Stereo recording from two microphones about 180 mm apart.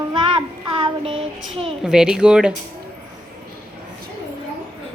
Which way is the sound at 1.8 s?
5° right (ahead or behind).